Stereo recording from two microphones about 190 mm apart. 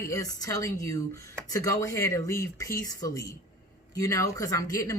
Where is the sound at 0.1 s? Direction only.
15° left (ahead or behind).